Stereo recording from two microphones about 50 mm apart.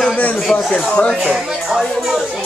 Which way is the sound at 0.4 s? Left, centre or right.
Centre.